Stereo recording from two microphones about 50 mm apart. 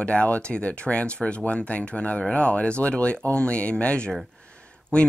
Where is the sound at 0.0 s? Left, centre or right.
Left.